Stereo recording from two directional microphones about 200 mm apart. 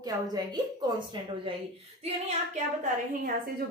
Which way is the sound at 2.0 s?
35° right (ahead or behind).